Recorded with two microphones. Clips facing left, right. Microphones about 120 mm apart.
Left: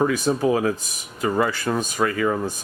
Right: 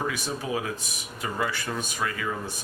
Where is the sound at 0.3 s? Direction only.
50° left (ahead or behind).